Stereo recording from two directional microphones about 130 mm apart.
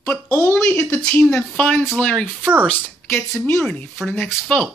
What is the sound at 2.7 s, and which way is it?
Speech, 15° left (ahead or behind).